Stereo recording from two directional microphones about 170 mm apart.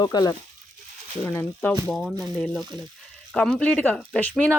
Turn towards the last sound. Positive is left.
turn(degrees=10)  # may be behind; listen again after turning